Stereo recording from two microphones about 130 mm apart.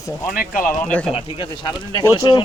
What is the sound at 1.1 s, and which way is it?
Speech, 40° left (ahead or behind).